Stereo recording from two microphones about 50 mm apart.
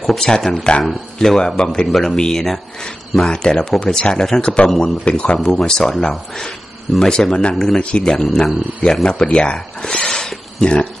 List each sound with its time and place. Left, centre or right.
0.1 s speech: centre
1.6 s speech: centre
1.9 s speech: centre
4.1 s speech: centre
4.6 s speech: centre
5.0 s speech: left
5.4 s speech: centre
7.8 s speech: left
8.1 s speech: centre